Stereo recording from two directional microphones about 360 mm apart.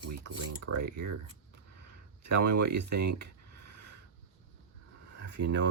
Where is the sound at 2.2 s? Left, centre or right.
Right.